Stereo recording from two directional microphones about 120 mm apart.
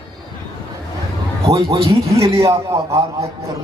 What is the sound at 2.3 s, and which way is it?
Speech, 25° right (ahead or behind).